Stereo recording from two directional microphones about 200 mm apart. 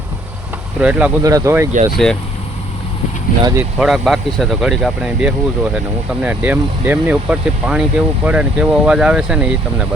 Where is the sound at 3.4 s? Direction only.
15° right (ahead or behind).